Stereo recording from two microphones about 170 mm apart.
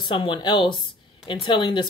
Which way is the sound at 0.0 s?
30° left (ahead or behind).